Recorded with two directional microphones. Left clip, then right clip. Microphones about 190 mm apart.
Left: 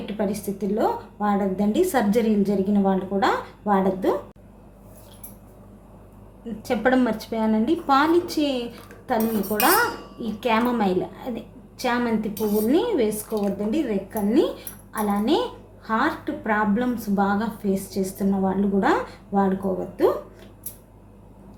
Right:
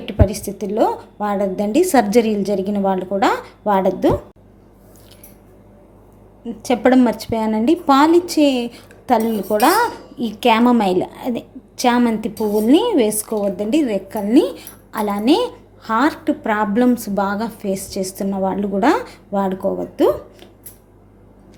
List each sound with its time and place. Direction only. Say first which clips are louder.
0.0 s a woman's voice: right 7 dB; 35° right (ahead or behind)
6.6 s a woman's voice: right 6 dB; 30° right (ahead or behind)